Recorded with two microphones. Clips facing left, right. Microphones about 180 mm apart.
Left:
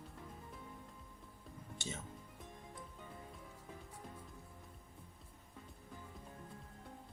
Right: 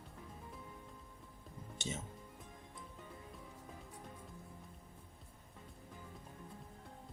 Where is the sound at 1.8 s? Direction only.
20° right (ahead or behind).